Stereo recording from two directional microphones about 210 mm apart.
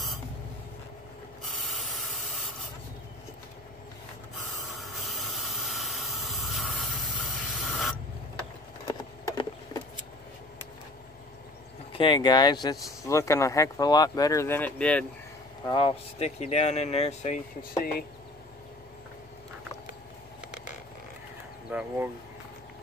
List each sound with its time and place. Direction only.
1.4 s sanding: centre (ahead or behind)
4.7 s hiss: centre (ahead or behind)
9.2 s a sound: 15° left (ahead or behind)
11.9 s speech: 25° left (ahead or behind); by 15.0 s 5° left (ahead or behind)
15.6 s speech: 25° left (ahead or behind)
21.6 s a sound: 10° right (ahead or behind)